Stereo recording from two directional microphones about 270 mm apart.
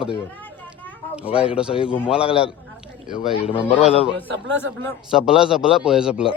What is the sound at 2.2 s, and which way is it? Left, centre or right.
Speech, left.